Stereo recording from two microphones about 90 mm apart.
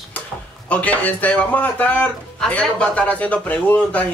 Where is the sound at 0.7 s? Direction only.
15° left (ahead or behind).